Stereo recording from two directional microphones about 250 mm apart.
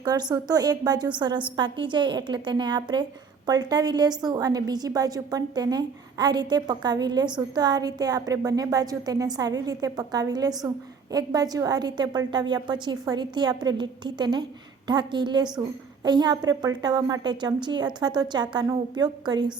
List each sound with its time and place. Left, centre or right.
0.0 s a woman's voice: centre